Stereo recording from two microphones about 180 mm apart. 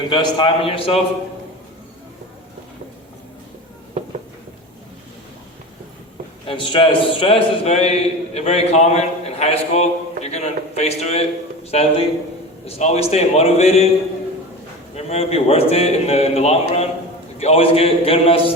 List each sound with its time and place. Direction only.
0.1 s a man's voice: 25° left (ahead or behind)
6.5 s a man's voice: 30° left (ahead or behind)
14.9 s a man's voice: 35° left (ahead or behind)